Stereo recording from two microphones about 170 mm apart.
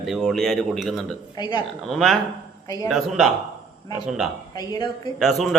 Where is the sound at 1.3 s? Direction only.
25° left (ahead or behind).